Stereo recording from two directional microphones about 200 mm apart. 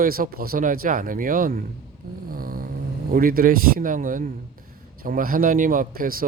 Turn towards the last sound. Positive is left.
turn(degrees=-45)  # may be behind; listen again after turning